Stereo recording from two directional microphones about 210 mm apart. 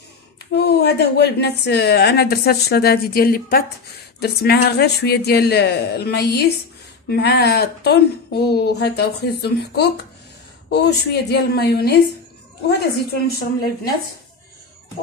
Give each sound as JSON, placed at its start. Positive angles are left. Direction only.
{"t": 0.6, "sound": "a woman's voice", "side_deg": 50}